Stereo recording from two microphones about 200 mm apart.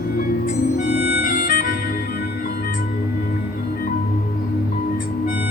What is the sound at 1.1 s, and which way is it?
Music, 45° left (ahead or behind).